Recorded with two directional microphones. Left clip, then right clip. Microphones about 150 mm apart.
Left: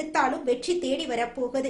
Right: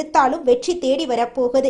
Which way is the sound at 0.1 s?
35° right (ahead or behind).